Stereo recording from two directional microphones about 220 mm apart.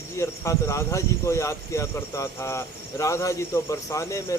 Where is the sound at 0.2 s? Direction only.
15° left (ahead or behind).